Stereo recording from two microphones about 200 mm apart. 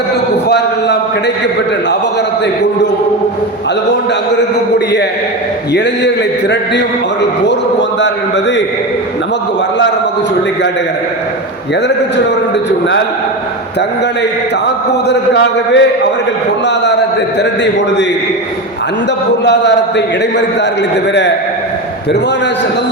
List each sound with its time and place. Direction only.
0.4 s a sound: 55° left (ahead or behind)
7.4 s a man's voice: 60° left (ahead or behind)
15.0 s a man's voice: 60° left (ahead or behind)